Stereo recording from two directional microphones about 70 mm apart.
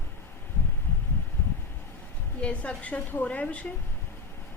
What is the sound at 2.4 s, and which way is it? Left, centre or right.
A woman's voice, centre.